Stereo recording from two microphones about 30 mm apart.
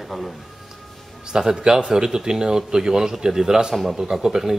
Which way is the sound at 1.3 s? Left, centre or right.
Right.